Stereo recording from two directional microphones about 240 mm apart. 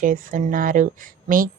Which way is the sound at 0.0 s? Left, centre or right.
Right.